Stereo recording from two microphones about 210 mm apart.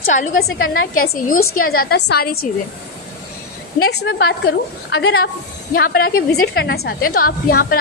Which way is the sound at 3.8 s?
50° left (ahead or behind).